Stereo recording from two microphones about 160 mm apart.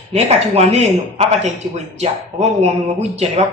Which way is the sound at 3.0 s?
45° right (ahead or behind).